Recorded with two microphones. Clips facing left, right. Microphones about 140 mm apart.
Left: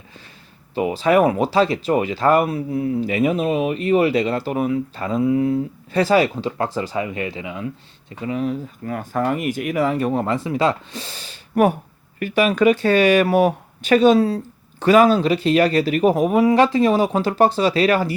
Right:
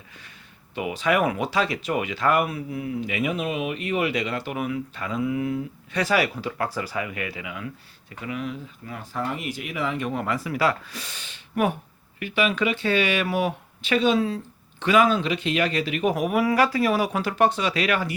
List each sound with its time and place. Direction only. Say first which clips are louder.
0.7 s speech: left 7 dB; 35° left (ahead or behind)
8.8 s speech: left 8 dB; 50° left (ahead or behind)
16.1 s speech: left 4 dB; 25° left (ahead or behind)